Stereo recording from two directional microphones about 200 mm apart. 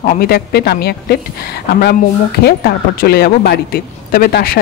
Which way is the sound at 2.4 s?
50° left (ahead or behind).